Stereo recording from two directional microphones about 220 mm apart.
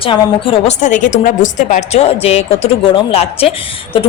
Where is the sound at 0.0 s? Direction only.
25° left (ahead or behind).